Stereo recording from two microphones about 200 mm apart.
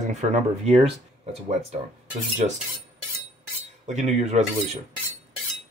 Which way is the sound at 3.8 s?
35° right (ahead or behind).